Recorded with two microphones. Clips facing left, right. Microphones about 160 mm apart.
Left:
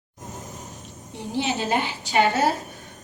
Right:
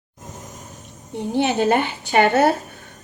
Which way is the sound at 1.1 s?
55° right (ahead or behind).